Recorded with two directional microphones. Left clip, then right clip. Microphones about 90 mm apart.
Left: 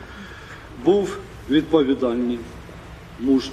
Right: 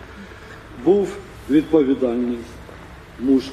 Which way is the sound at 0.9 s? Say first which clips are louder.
Right 1 dB; 20° left (ahead or behind).